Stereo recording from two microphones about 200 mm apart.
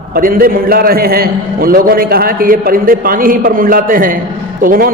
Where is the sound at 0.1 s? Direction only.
50° right (ahead or behind).